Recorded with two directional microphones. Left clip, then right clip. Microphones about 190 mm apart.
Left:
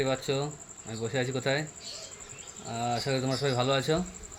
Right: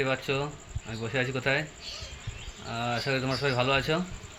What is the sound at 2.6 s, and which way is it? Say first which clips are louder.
Speech: right 1 dB; 10° left (ahead or behind).